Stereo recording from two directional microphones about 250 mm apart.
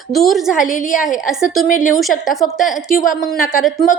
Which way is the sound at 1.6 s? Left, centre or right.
Left.